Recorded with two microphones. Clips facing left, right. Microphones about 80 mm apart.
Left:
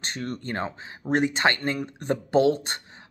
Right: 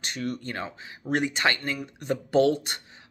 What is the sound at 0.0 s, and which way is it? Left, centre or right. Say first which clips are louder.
Speech: even; left.